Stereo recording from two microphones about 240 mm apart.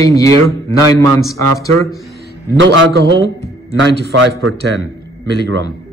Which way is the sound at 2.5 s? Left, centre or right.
Right.